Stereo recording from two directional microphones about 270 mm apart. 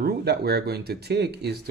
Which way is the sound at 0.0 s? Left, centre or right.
Right.